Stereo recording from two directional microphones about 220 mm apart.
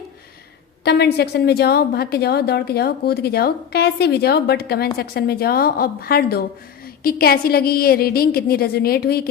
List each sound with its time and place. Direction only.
0.9 s a woman's voice: 50° left (ahead or behind)